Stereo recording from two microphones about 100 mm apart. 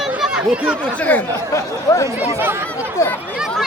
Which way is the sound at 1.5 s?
30° left (ahead or behind).